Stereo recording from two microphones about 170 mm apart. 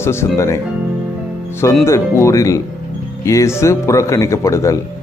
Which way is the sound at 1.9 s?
15° left (ahead or behind).